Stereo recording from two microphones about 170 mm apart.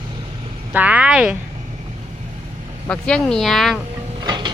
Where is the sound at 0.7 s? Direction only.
10° right (ahead or behind).